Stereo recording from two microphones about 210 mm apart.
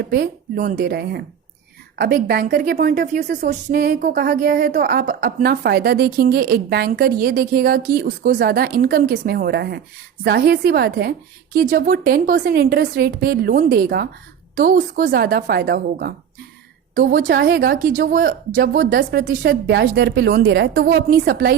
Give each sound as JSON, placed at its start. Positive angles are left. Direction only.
{"t": 0.0, "sound": "a woman's voice", "side_deg": -50}